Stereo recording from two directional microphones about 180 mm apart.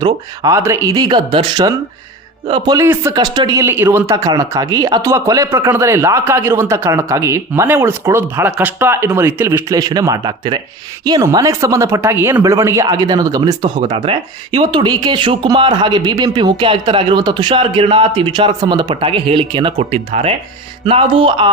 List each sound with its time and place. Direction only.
0.0 s speech: 20° right (ahead or behind)
2.8 s speech: 15° right (ahead or behind)